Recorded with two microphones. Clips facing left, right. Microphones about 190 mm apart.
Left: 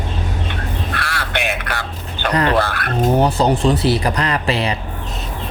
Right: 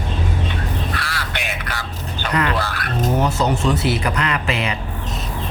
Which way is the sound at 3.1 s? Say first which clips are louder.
Left 4 dB; 35° left (ahead or behind).